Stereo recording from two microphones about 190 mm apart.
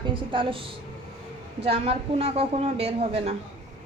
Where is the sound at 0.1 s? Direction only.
25° right (ahead or behind).